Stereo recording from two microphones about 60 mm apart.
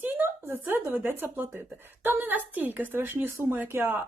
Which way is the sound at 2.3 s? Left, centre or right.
Right.